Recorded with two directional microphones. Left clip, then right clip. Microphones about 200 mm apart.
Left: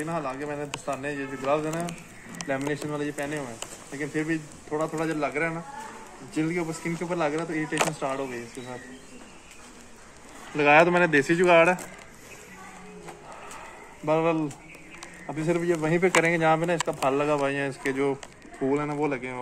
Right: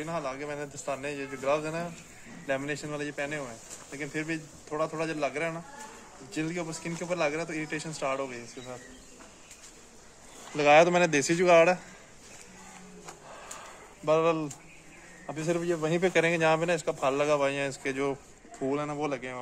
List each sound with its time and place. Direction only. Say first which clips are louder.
0.0 s a man's voice: left 3 dB; 30° right (ahead or behind)
10.5 s speech: left 2 dB; 65° right (ahead or behind)
14.0 s speech: left 1 dB; 40° right (ahead or behind)